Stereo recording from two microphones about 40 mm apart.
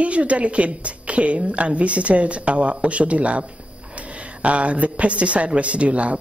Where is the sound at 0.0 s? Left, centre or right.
Right.